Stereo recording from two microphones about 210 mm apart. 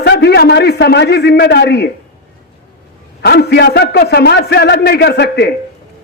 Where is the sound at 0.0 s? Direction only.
55° left (ahead or behind).